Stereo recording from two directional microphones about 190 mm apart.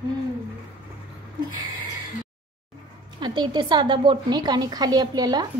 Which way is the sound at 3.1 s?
25° right (ahead or behind).